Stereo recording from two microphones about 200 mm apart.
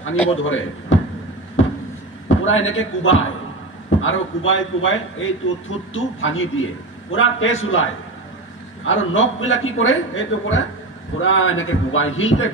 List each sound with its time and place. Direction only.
0.4 s a man's voice: 80° left
2.2 s a man's voice: 80° left
8.8 s a man's voice: 75° left (ahead or behind)